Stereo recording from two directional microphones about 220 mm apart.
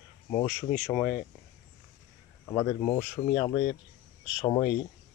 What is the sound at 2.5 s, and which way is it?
Speech, 10° left (ahead or behind).